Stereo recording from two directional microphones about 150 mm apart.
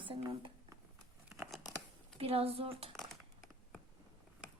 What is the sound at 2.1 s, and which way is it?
Speech, 40° right (ahead or behind).